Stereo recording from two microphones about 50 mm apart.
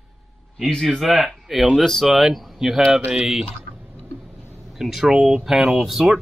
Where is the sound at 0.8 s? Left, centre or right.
Centre.